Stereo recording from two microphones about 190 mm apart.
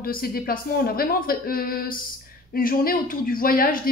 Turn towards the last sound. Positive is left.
turn(degrees=50)  # may be behind; listen again after turning